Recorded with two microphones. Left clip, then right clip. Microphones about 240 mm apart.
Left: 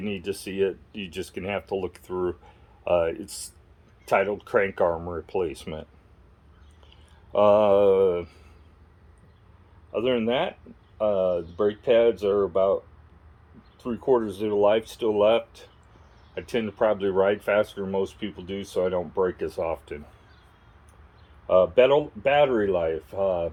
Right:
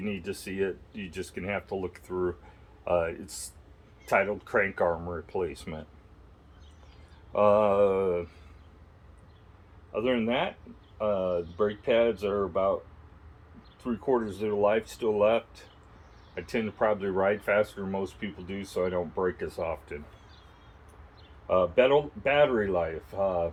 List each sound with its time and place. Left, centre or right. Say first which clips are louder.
0.0 s speech: left 4 dB; left
7.3 s speech: left 4 dB; left
9.9 s speech: left 4 dB; left
13.8 s speech: left 5 dB; left
21.4 s speech: left 5 dB; left